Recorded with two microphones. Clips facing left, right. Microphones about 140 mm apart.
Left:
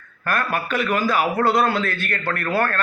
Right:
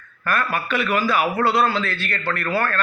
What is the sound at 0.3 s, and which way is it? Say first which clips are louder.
A man's voice: even; 45° left (ahead or behind).